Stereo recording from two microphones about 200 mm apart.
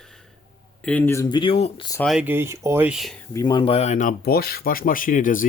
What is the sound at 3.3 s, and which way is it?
Speech, 20° left (ahead or behind).